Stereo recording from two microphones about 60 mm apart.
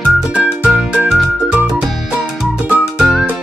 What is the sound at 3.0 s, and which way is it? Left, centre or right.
Music, centre.